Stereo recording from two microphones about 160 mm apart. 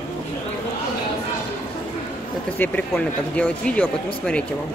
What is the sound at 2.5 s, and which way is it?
Speech, 10° left (ahead or behind).